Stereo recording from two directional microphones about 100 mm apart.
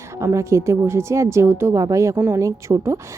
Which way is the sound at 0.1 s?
30° right (ahead or behind).